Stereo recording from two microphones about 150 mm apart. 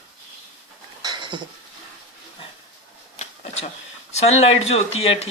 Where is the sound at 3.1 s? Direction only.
45° left (ahead or behind).